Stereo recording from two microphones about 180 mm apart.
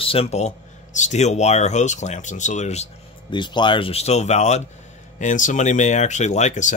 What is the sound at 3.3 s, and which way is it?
Speech, 25° left (ahead or behind).